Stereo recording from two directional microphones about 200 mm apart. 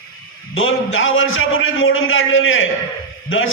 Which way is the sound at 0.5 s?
85° left.